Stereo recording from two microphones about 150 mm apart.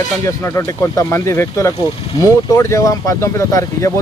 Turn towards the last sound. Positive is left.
turn(degrees=20)  # may be behind; listen again after turning